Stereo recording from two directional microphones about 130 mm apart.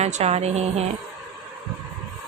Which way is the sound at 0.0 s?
55° right (ahead or behind).